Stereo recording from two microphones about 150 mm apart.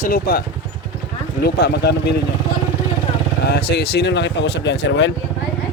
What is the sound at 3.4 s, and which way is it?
Speech, 90° left.